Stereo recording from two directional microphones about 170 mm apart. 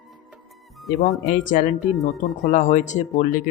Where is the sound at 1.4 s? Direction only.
50° left (ahead or behind).